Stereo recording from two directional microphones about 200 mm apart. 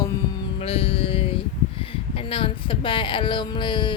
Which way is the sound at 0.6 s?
30° left (ahead or behind).